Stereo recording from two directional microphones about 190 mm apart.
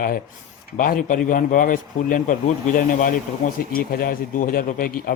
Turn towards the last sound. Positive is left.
turn(degrees=50)  # may be behind; listen again after turning